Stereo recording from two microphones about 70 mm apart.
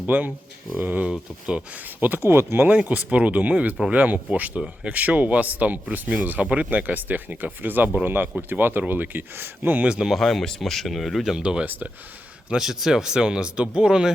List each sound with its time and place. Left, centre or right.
0.0 s speech: right
2.6 s speech: right
9.9 s speech: centre
10.2 s speech: centre
11.3 s speech: centre
11.6 s speech: right
12.5 s speech: centre